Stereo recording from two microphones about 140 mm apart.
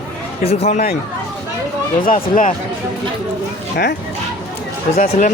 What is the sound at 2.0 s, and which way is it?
Speech, 70° left (ahead or behind).